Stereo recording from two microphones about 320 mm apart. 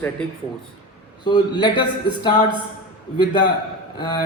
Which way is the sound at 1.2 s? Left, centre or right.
Centre.